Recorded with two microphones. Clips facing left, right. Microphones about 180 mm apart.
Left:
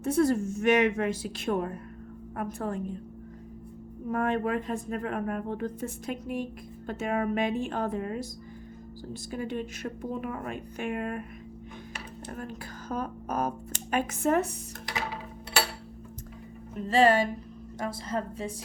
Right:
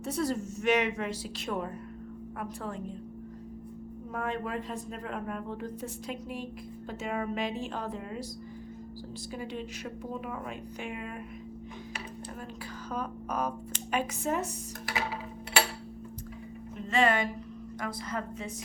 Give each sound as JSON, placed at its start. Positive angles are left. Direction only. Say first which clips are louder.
{"t": 0.0, "sound": "speech", "louder": "left 7 dB", "side_deg": 50}
{"t": 4.1, "sound": "speech", "louder": "left 6 dB", "side_deg": 55}
{"t": 9.3, "sound": "speech", "louder": "left 5 dB", "side_deg": 50}
{"t": 12.4, "sound": "speech", "louder": "left 2 dB", "side_deg": 50}
{"t": 16.9, "sound": "a woman's voice", "louder": "left 5 dB", "side_deg": 30}